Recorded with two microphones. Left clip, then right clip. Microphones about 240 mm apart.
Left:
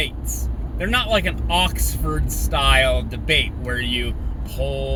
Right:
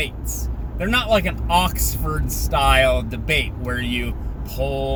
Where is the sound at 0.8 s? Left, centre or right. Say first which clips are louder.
Right 1 dB; centre.